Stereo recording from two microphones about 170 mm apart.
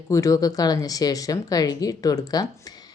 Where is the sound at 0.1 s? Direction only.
20° left (ahead or behind).